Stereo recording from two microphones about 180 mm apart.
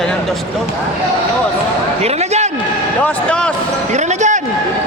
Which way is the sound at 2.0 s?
35° right (ahead or behind).